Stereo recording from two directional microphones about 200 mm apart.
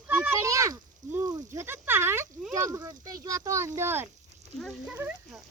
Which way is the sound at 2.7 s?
15° right (ahead or behind).